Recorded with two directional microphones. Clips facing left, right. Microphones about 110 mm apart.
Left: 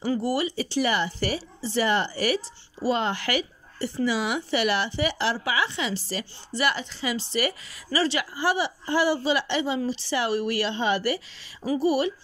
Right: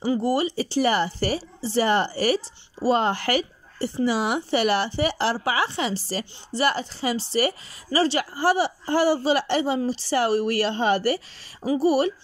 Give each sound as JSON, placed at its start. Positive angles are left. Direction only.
{"t": 0.0, "sound": "speech", "side_deg": -25}